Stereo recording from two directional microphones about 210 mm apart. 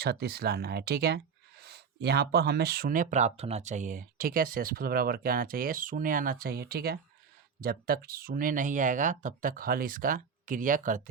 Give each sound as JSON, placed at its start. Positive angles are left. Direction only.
{"t": 0.0, "sound": "speech", "side_deg": -50}